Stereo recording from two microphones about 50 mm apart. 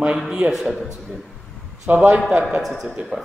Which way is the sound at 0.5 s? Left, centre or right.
Centre.